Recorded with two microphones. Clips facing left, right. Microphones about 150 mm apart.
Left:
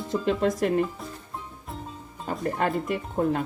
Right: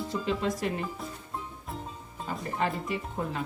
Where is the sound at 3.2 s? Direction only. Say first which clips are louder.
Left 12 dB; 50° left (ahead or behind).